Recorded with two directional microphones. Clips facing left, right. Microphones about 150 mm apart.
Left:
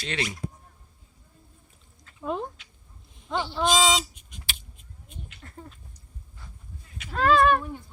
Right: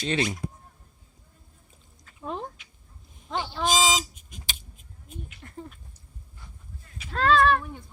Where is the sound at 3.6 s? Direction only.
5° right (ahead or behind).